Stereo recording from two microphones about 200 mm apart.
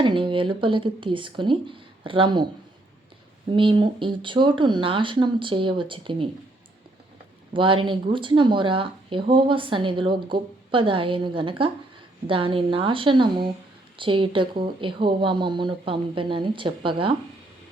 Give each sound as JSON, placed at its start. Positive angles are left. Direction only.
{"t": 0.0, "sound": "speech", "side_deg": -25}
{"t": 3.5, "sound": "speech", "side_deg": -25}
{"t": 7.5, "sound": "speech", "side_deg": -25}